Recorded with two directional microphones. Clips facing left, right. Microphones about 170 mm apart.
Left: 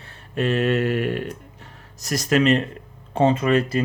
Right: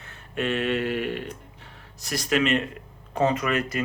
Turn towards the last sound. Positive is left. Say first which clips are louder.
# left 6 dB
turn(degrees=30)  # may be behind; listen again after turning